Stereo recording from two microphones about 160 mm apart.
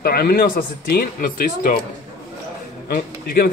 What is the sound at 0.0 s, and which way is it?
A man's voice, 70° left (ahead or behind).